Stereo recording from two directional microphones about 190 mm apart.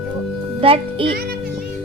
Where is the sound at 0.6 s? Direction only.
30° right (ahead or behind).